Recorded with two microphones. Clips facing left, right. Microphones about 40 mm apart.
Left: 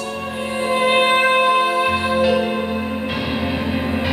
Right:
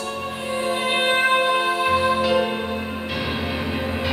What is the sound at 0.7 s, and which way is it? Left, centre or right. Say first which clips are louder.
Music: left 6 dB; centre.